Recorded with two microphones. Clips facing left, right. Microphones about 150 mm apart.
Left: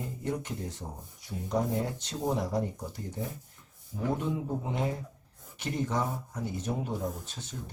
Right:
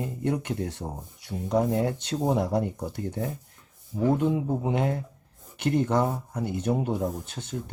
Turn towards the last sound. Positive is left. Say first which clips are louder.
# right 6 dB
turn(degrees=-60)  # may be behind; listen again after turning